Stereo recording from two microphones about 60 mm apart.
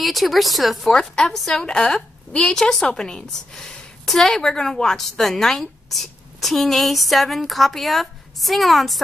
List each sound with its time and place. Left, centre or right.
0.0 s a woman's voice: centre
0.9 s a woman's voice: centre